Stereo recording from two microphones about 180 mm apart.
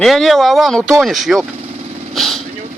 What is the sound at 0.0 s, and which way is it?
Speech, centre (ahead or behind).